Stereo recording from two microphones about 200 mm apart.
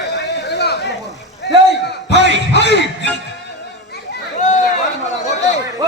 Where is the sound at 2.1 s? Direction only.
60° left (ahead or behind).